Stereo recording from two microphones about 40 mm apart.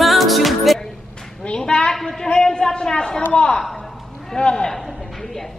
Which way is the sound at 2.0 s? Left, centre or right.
Centre.